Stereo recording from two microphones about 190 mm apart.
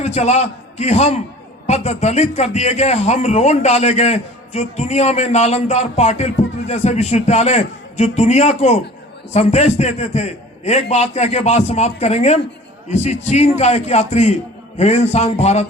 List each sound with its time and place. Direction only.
0.0 s a man's voice: 35° left (ahead or behind)